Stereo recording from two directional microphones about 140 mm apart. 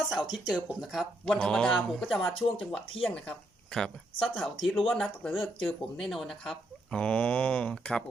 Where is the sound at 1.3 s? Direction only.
5° left (ahead or behind).